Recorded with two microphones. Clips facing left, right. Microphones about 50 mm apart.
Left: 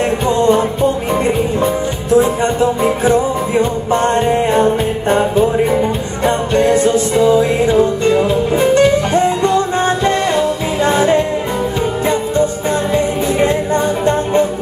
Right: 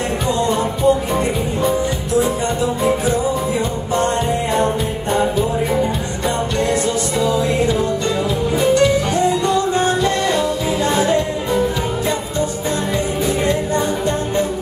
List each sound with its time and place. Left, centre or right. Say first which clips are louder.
2.1 s music: left 6 dB; left
12.9 s music: left 4 dB; left